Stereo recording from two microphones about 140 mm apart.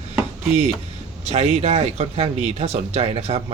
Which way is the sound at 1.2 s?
50° right (ahead or behind).